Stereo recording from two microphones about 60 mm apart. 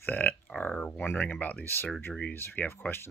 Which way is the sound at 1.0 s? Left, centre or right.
Left.